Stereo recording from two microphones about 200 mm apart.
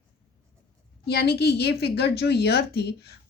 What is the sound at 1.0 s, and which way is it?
Speech, 55° left (ahead or behind).